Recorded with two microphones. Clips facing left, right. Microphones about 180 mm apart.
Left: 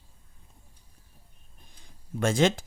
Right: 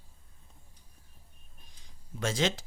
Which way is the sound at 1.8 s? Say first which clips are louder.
Left 6 dB; 55° left (ahead or behind).